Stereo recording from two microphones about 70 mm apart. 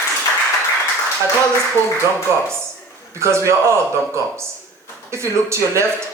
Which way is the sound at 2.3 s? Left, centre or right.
Right.